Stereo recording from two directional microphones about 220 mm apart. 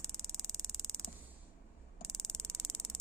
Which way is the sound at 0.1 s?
Centre (ahead or behind).